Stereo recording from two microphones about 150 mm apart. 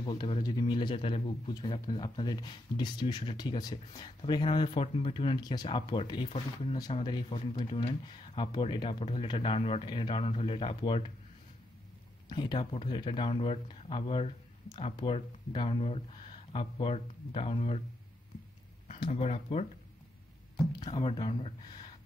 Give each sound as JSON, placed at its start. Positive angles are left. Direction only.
{"t": 0.0, "sound": "speech", "side_deg": 35}
{"t": 12.3, "sound": "speech", "side_deg": 30}
{"t": 18.9, "sound": "speech", "side_deg": 35}
{"t": 20.8, "sound": "speech", "side_deg": 35}